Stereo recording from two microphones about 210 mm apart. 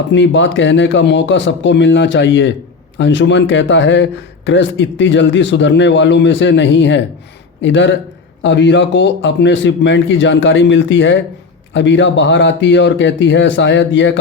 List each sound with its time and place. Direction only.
0.1 s speech: 60° left (ahead or behind)